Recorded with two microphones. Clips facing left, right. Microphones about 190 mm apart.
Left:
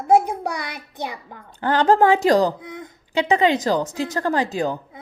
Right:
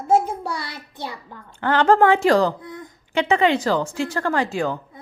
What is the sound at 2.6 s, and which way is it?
Child singing, 20° left (ahead or behind).